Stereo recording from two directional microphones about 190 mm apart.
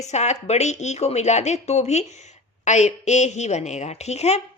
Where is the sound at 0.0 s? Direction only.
35° left (ahead or behind).